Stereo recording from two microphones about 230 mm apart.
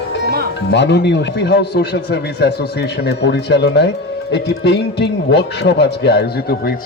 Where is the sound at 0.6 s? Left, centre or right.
Left.